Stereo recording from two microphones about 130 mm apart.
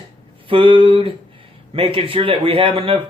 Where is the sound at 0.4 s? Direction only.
40° right (ahead or behind).